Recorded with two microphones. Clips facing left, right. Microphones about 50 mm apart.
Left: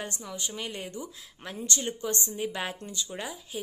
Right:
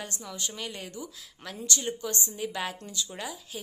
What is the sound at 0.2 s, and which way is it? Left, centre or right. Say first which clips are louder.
A woman's voice: left 1 dB; centre.